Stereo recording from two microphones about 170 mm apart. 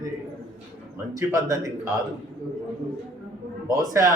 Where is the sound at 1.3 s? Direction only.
20° right (ahead or behind).